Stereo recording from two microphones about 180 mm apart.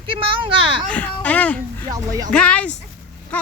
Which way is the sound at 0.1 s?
30° right (ahead or behind).